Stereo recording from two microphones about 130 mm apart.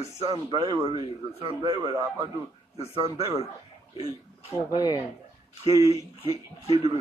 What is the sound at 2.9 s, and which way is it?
Speech, 45° right (ahead or behind).